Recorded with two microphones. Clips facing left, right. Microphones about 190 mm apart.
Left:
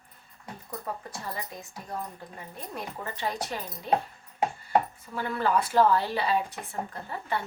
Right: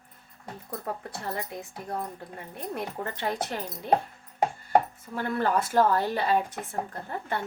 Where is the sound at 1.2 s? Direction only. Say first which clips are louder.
Right 4 dB; 60° right (ahead or behind).